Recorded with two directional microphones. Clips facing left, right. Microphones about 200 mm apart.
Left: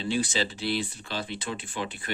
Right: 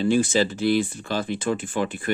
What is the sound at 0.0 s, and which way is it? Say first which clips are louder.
Speech: right 8 dB; 50° right (ahead or behind).